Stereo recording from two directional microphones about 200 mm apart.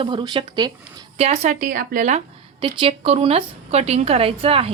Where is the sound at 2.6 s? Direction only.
30° right (ahead or behind).